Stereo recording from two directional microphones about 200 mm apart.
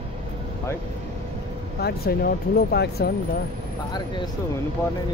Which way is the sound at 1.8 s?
50° left (ahead or behind).